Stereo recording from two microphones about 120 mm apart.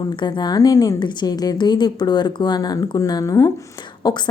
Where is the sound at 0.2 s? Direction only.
40° left (ahead or behind).